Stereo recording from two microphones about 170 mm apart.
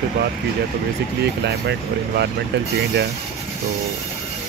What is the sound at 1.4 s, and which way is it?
Speech, 80° right.